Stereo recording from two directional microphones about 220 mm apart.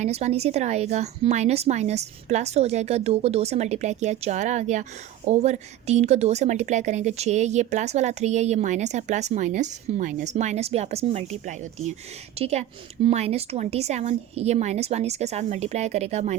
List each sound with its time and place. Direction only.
0.0 s a woman's voice: 30° right (ahead or behind)